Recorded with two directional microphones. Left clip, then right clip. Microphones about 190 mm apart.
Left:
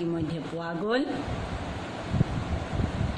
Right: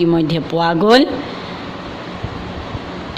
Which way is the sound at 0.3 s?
55° right (ahead or behind).